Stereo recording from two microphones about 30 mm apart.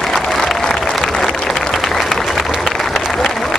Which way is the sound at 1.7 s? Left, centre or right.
Centre.